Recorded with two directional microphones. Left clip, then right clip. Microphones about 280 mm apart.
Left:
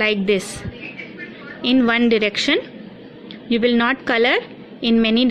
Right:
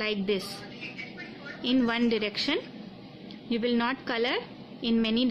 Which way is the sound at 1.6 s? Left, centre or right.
Centre.